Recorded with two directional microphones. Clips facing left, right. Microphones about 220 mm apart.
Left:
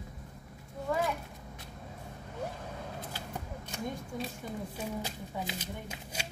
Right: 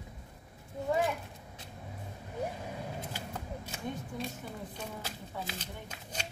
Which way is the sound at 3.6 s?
Centre (ahead or behind).